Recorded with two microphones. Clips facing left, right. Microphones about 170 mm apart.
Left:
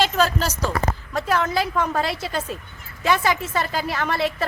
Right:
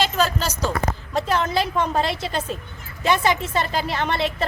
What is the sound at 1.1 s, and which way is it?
A woman's voice, 25° right (ahead or behind).